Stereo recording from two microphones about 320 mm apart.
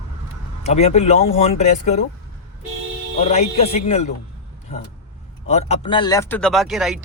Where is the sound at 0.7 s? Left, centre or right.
Centre.